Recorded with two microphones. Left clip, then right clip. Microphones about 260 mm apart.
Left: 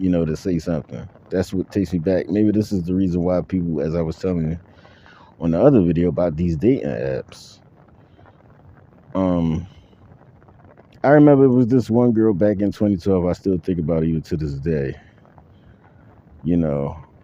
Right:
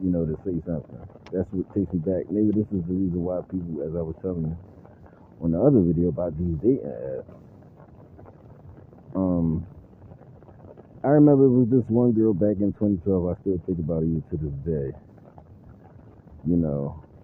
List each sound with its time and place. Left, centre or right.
0.1 s speech: left
5.4 s speech: left
9.1 s speech: left
11.0 s speech: left
16.5 s speech: left